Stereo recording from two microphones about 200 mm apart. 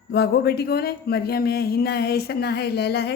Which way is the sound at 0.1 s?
55° left (ahead or behind).